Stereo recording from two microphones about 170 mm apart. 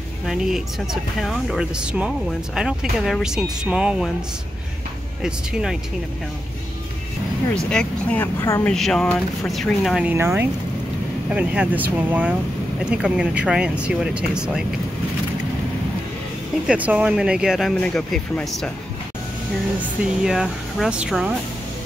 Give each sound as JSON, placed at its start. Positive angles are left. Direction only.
{"t": 0.3, "sound": "speech", "side_deg": 0}
{"t": 5.2, "sound": "speech", "side_deg": -5}
{"t": 7.7, "sound": "speech", "side_deg": 10}
{"t": 8.4, "sound": "speech", "side_deg": 20}
{"t": 8.6, "sound": "speech", "side_deg": 5}
{"t": 10.1, "sound": "speech", "side_deg": -10}
{"t": 16.6, "sound": "speech", "side_deg": -10}
{"t": 20.2, "sound": "speech", "side_deg": 0}